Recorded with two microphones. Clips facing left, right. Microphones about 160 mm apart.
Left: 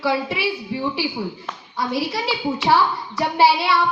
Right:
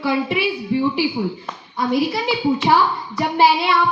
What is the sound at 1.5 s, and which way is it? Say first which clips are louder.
A child's voice: right 4 dB; 15° right (ahead or behind).